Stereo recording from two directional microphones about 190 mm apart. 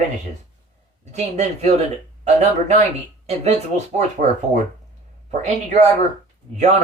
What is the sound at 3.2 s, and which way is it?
Speech, 35° right (ahead or behind).